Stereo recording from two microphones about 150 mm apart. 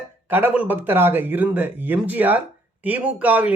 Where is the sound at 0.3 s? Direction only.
10° right (ahead or behind).